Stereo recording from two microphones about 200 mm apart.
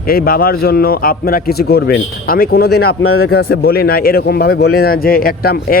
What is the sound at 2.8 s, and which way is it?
Speech, 90° left.